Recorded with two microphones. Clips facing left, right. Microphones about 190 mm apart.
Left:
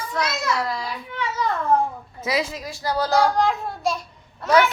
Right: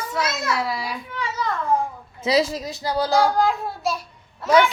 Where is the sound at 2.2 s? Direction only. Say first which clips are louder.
Right 5 dB; 30° right (ahead or behind).